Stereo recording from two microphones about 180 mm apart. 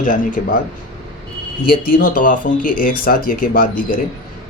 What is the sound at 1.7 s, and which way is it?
Speech, 50° left (ahead or behind).